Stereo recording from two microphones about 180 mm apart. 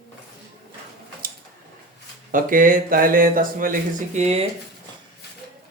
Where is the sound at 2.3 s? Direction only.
50° right (ahead or behind).